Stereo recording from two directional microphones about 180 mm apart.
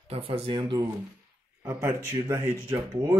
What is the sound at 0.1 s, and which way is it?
Speech, 30° right (ahead or behind).